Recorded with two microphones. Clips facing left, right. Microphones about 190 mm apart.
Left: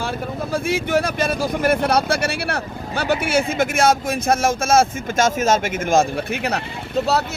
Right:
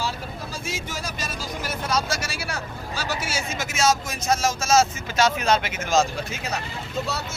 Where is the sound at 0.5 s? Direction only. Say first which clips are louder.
Left 16 dB; 60° left (ahead or behind).